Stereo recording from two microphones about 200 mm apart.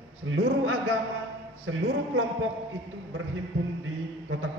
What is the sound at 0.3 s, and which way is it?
A man's voice, 90° right.